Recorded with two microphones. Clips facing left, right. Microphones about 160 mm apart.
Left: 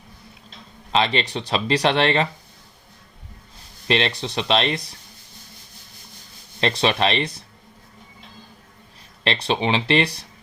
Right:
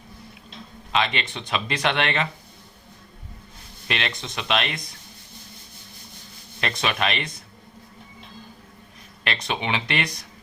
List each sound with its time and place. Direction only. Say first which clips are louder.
0.9 s speech: left 4 dB; 35° left (ahead or behind)
3.8 s speech: left 7 dB; 30° left (ahead or behind)
6.6 s speech: left 5 dB; 30° left (ahead or behind)
9.2 s speech: left 6 dB; 30° left (ahead or behind)